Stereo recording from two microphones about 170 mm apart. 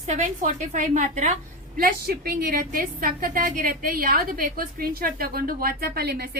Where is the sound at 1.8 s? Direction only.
60° right (ahead or behind).